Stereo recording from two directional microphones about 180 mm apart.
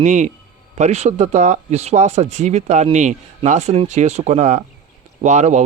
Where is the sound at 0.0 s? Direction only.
40° right (ahead or behind).